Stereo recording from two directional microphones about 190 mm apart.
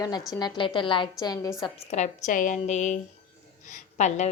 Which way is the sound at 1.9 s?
40° left (ahead or behind).